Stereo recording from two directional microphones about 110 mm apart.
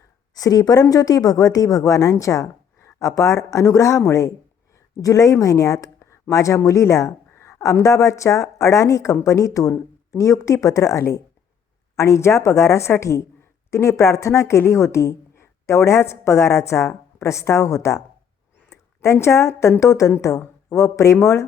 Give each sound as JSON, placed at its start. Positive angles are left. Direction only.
{"t": 0.3, "sound": "speech", "side_deg": 35}